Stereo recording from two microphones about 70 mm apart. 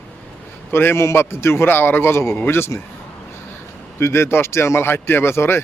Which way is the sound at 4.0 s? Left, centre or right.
Left.